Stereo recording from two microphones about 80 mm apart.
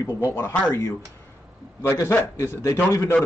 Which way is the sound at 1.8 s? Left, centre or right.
Left.